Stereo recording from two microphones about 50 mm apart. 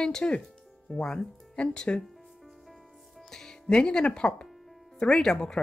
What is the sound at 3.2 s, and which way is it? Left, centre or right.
Music, centre.